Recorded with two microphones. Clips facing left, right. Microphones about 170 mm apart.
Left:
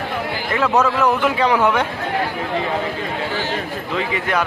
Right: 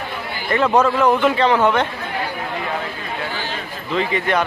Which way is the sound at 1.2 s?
10° left (ahead or behind).